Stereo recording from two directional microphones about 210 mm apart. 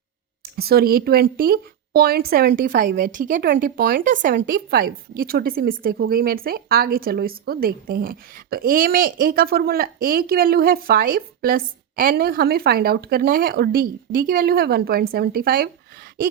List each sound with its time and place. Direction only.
0.5 s speech: 45° right (ahead or behind)